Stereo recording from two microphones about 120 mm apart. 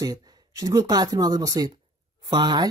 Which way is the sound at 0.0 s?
30° right (ahead or behind).